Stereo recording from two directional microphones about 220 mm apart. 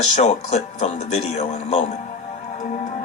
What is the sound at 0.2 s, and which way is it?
Speech, 30° left (ahead or behind).